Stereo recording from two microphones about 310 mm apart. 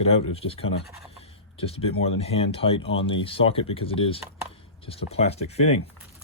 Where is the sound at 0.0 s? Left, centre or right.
Centre.